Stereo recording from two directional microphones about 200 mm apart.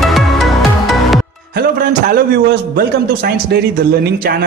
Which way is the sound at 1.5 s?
50° right (ahead or behind).